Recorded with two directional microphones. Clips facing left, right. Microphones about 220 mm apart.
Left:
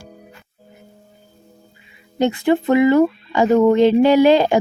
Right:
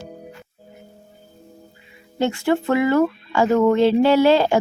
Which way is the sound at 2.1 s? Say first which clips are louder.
Left 3 dB; 20° left (ahead or behind).